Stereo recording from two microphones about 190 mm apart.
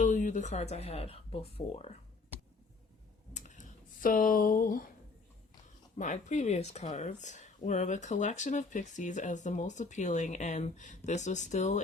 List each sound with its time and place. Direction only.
0.0 s speech: 45° left (ahead or behind)
3.3 s a sound: 40° left (ahead or behind)
6.0 s speech: 40° left (ahead or behind)